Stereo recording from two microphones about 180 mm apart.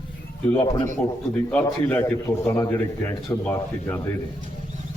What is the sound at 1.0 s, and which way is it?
A man's voice, 5° left (ahead or behind).